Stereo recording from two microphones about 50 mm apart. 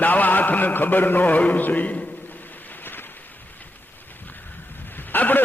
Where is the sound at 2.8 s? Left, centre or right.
Left.